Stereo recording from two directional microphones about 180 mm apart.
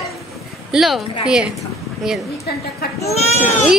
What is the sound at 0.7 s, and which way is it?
A child's voice, centre (ahead or behind).